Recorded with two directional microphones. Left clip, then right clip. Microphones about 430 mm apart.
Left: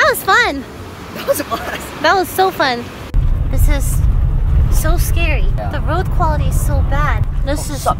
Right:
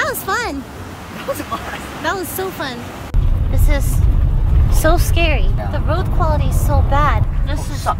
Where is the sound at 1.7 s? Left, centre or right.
Centre.